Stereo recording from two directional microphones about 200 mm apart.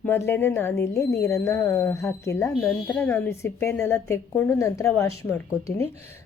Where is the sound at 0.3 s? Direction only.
10° left (ahead or behind).